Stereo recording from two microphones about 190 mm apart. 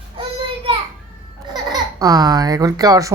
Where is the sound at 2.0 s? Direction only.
20° right (ahead or behind).